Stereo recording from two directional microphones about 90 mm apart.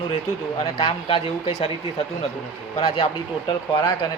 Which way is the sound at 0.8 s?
90° left.